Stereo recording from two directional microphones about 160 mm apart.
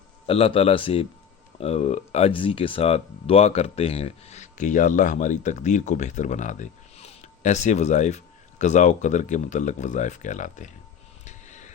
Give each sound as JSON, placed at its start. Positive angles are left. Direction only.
{"t": 0.3, "sound": "a man's voice", "side_deg": 35}
{"t": 11.3, "sound": "vehicle", "side_deg": 50}